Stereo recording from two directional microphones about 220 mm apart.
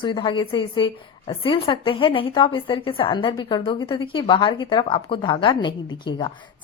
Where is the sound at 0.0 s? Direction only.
25° left (ahead or behind).